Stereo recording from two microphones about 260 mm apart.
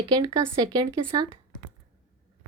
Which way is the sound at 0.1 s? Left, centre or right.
Centre.